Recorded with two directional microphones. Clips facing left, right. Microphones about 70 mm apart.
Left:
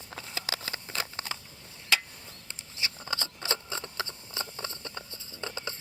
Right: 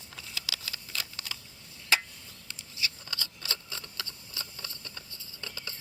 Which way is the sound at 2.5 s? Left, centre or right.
Left.